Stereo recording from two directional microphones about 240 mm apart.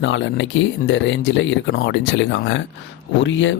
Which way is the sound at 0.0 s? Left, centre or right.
Left.